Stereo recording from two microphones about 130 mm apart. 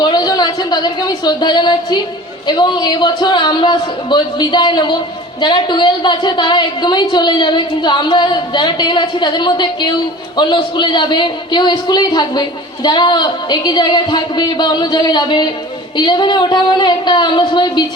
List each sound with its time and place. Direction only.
0.0 s a woman's voice: 30° left (ahead or behind)